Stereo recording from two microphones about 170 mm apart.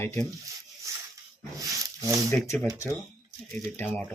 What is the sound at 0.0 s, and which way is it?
Speech, 15° left (ahead or behind).